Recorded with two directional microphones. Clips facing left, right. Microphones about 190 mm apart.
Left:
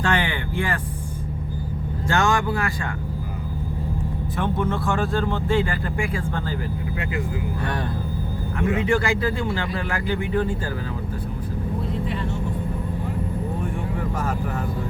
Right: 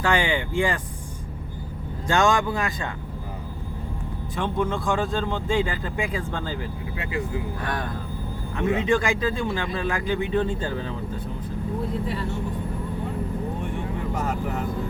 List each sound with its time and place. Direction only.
0.0 s speech: 10° right (ahead or behind)
2.0 s speech: 15° right (ahead or behind)
4.5 s speech: 15° right (ahead or behind)
8.5 s a man's voice: 20° right (ahead or behind)